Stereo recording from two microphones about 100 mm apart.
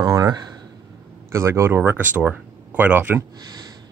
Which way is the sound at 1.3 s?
25° right (ahead or behind).